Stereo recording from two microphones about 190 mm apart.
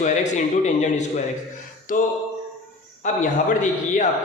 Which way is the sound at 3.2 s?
45° left (ahead or behind).